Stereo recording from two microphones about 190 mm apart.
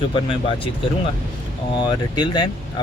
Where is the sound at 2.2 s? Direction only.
20° left (ahead or behind).